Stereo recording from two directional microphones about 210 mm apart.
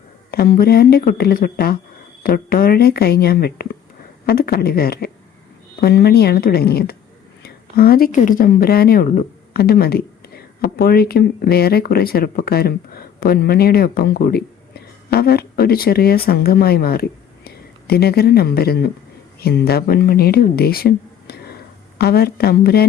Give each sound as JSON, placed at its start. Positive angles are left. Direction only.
{"t": 0.3, "sound": "speech", "side_deg": 45}